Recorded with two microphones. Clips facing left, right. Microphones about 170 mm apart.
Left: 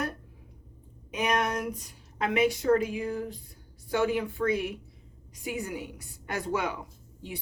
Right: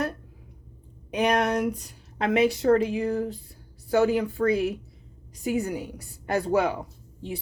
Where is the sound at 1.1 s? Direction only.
35° right (ahead or behind).